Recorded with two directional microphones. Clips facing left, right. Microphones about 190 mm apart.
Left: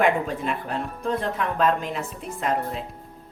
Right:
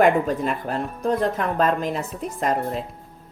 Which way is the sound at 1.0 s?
40° right (ahead or behind).